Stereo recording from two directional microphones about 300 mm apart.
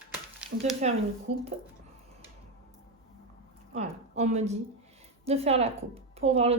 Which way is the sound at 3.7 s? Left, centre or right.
Right.